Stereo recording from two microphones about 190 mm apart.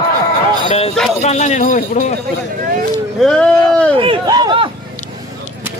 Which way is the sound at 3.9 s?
25° right (ahead or behind).